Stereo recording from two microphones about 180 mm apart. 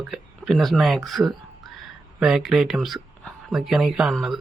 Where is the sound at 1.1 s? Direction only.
Centre (ahead or behind).